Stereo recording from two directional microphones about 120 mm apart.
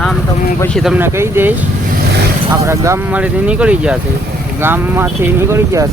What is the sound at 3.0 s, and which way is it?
Speech, 10° right (ahead or behind).